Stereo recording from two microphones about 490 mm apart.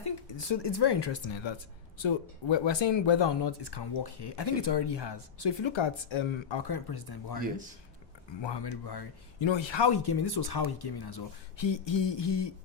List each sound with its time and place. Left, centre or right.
0.0 s speech: left